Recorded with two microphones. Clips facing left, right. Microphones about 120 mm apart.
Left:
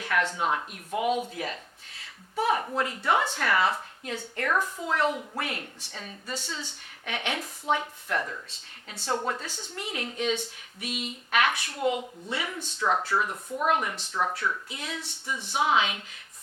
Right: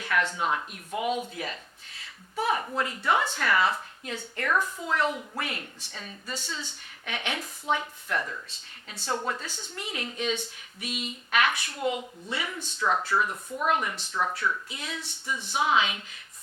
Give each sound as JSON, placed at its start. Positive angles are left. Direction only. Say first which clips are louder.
{"t": 0.0, "sound": "speech", "louder": "left 1 dB", "side_deg": 45}
{"t": 2.4, "sound": "speech", "louder": "left 1 dB", "side_deg": 45}
{"t": 6.3, "sound": "speech", "louder": "left 1 dB", "side_deg": 65}
{"t": 7.0, "sound": "speech", "louder": "left 1 dB", "side_deg": 50}
{"t": 9.7, "sound": "speech", "louder": "left 2 dB", "side_deg": 50}
{"t": 12.8, "sound": "speech", "louder": "even", "side_deg": 35}